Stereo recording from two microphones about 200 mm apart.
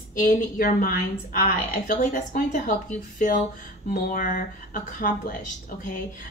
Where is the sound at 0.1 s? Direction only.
45° left (ahead or behind).